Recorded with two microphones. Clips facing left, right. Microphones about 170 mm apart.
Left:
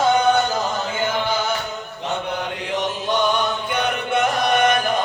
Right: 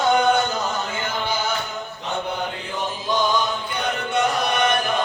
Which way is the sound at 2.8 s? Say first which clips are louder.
Left 1 dB; 70° left (ahead or behind).